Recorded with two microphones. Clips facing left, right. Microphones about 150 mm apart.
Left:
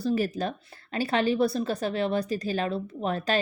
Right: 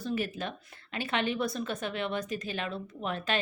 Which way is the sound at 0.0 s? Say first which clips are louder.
Left 6 dB; 35° left (ahead or behind).